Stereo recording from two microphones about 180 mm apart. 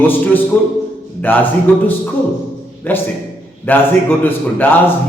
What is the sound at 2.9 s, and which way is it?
Speech, 10° left (ahead or behind).